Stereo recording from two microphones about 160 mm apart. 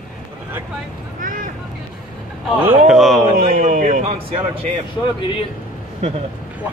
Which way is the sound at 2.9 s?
Centre (ahead or behind).